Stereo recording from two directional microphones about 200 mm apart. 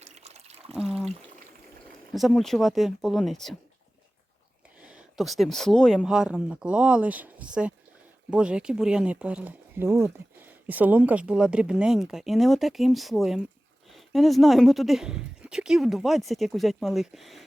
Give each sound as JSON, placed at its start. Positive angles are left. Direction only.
{"t": 0.0, "sound": "water", "side_deg": -35}
{"t": 0.8, "sound": "a sound", "side_deg": 0}
{"t": 2.1, "sound": "speech", "side_deg": 0}
{"t": 4.8, "sound": "speech", "side_deg": -5}